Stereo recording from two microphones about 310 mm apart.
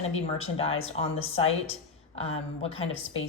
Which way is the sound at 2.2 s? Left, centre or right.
Centre.